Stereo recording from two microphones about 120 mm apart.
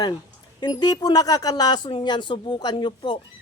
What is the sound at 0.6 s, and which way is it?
Speech, 35° left (ahead or behind).